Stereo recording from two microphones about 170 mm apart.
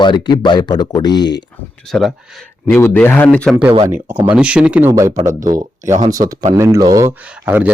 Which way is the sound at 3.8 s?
10° right (ahead or behind).